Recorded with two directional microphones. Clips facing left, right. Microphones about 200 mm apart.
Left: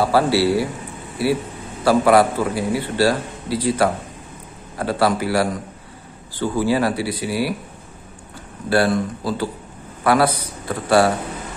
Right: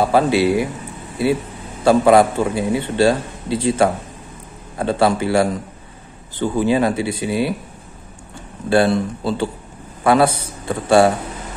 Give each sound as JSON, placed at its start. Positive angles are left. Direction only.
{"t": 0.0, "sound": "a man's voice", "side_deg": -20}
{"t": 1.9, "sound": "a man's voice", "side_deg": -25}
{"t": 8.6, "sound": "a man's voice", "side_deg": -25}